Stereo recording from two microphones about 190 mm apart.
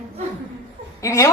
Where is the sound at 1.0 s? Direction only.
15° left (ahead or behind).